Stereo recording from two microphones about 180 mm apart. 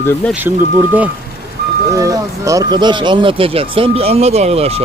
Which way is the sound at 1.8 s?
20° right (ahead or behind).